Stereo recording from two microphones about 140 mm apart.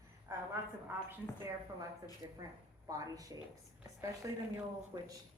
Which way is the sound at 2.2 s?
25° right (ahead or behind).